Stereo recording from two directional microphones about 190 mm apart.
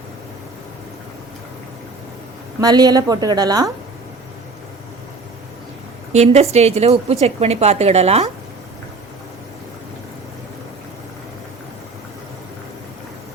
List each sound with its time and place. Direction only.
2.6 s a woman's voice: 20° right (ahead or behind)
6.1 s a woman's voice: 35° right (ahead or behind)